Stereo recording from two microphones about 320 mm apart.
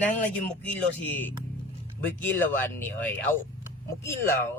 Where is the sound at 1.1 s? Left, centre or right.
Centre.